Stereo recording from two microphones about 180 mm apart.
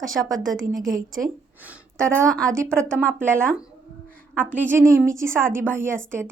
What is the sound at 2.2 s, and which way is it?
Speech, 5° left (ahead or behind).